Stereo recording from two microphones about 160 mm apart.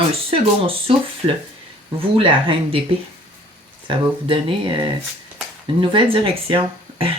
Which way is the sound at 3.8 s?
30° right (ahead or behind).